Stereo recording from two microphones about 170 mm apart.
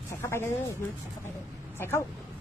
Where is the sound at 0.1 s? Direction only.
15° left (ahead or behind).